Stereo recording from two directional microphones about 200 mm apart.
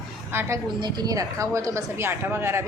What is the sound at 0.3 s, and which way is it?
A woman's voice, 10° right (ahead or behind).